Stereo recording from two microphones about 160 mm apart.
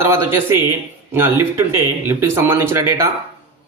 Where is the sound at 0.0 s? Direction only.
15° right (ahead or behind).